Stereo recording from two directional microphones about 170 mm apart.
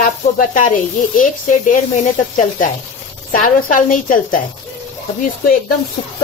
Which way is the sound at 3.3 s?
55° left (ahead or behind).